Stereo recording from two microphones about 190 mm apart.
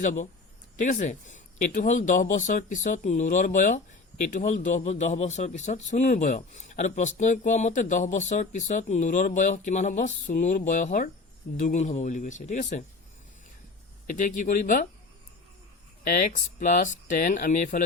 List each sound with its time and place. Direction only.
0.0 s a man's voice: 40° left (ahead or behind)
14.1 s speech: 40° left (ahead or behind)
16.0 s speech: 45° left (ahead or behind)